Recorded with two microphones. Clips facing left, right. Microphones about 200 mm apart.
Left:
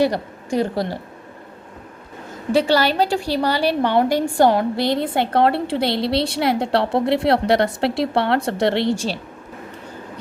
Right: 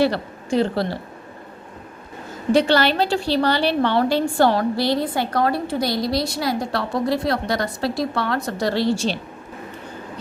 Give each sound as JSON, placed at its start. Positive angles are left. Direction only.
{"t": 0.0, "sound": "a woman's voice", "side_deg": 15}
{"t": 2.5, "sound": "a woman's voice", "side_deg": 10}